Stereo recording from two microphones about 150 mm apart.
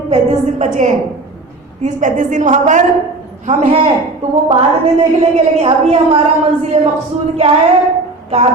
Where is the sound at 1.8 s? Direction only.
55° right (ahead or behind).